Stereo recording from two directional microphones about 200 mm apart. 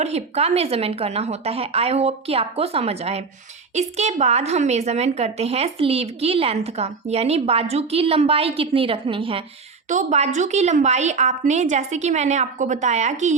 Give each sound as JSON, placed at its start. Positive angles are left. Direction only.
{"t": 0.0, "sound": "a woman's voice", "side_deg": -30}